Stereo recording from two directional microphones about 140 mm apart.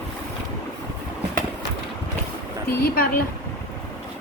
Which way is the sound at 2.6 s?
90° left.